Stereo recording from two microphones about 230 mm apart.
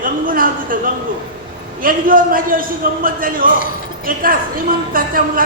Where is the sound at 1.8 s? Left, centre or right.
Right.